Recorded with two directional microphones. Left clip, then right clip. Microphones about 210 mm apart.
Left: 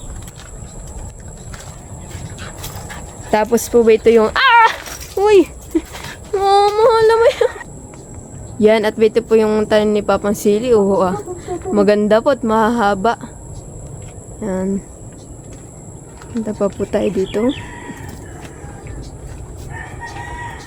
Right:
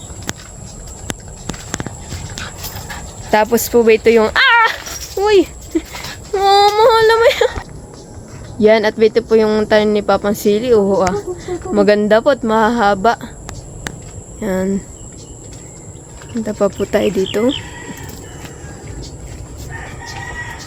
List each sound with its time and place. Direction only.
3.3 s speech: 5° left (ahead or behind)
5.1 s dog: 15° left (ahead or behind)
6.3 s speech: centre (ahead or behind)
8.5 s speech: 5° left (ahead or behind)
14.4 s speech: 5° right (ahead or behind)
16.4 s speech: centre (ahead or behind)